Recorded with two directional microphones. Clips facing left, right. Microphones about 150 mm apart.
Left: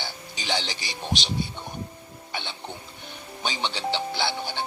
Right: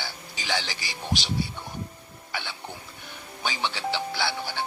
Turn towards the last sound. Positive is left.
turn(degrees=20)  # may be behind; listen again after turning